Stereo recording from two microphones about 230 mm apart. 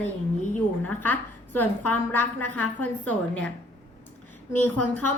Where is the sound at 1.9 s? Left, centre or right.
Centre.